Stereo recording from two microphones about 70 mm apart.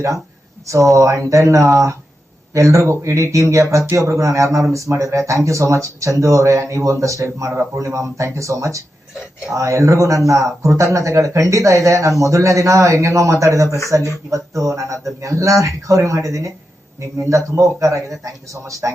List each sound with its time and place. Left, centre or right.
0.7 s speech: right